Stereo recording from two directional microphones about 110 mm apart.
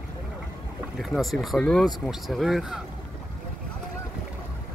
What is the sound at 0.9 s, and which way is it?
Speech, centre (ahead or behind).